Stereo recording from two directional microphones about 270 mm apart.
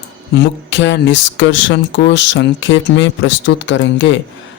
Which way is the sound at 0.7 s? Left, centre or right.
Left.